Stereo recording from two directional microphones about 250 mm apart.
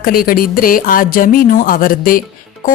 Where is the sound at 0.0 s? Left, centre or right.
Left.